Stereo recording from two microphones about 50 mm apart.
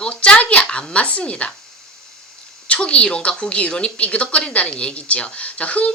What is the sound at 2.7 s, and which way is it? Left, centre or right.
Speech, left.